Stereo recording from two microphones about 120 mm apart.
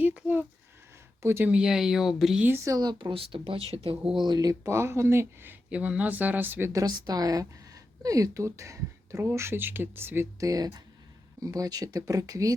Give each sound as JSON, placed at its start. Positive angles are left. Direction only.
{"t": 0.2, "sound": "a sound", "side_deg": -15}
{"t": 1.2, "sound": "speech", "side_deg": -20}
{"t": 1.5, "sound": "speech", "side_deg": -5}
{"t": 2.5, "sound": "speech", "side_deg": -30}
{"t": 3.1, "sound": "speech", "side_deg": -50}
{"t": 4.2, "sound": "speech", "side_deg": -35}
{"t": 6.7, "sound": "speech", "side_deg": -35}
{"t": 10.5, "sound": "speech", "side_deg": -30}